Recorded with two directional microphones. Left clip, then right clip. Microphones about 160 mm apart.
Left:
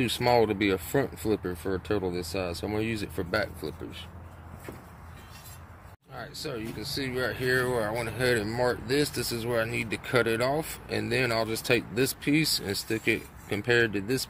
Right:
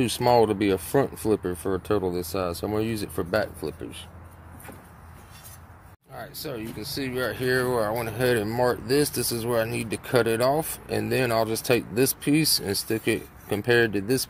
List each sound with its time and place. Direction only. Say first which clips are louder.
0.0 s speech: right 4 dB; 30° right (ahead or behind)
6.1 s speech: right 1 dB; 40° right (ahead or behind)